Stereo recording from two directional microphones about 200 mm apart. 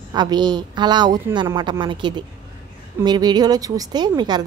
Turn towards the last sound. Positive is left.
turn(degrees=-20)  # may be behind; listen again after turning